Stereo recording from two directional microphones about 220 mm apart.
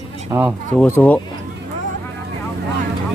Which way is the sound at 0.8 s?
10° left (ahead or behind).